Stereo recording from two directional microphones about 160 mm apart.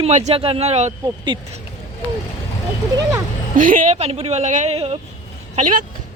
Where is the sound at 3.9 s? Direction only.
40° right (ahead or behind).